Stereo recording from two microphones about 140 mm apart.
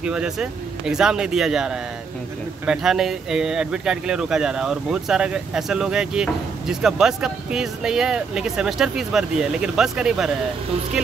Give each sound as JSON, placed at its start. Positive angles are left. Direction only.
{"t": 0.0, "sound": "speech", "side_deg": -5}